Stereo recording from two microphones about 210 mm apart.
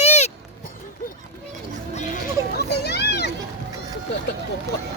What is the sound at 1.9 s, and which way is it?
Music, 35° left (ahead or behind).